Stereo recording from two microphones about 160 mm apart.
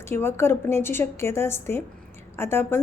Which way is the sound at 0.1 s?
15° left (ahead or behind).